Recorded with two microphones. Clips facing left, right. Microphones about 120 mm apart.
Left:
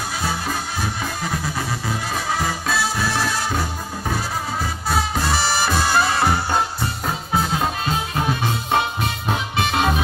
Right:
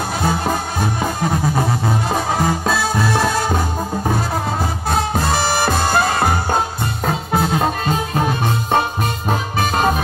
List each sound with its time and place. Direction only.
0.2 s music: 50° right (ahead or behind)
4.9 s music: 50° right (ahead or behind)